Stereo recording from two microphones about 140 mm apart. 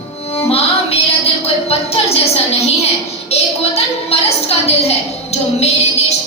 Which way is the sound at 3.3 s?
50° left (ahead or behind).